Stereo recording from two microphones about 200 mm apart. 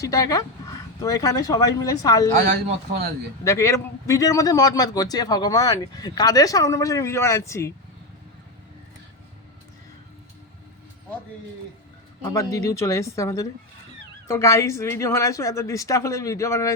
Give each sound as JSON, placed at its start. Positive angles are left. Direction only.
{"t": 0.0, "sound": "speech", "side_deg": 15}
{"t": 3.4, "sound": "a man's voice", "side_deg": 15}
{"t": 12.2, "sound": "a man's voice", "side_deg": 15}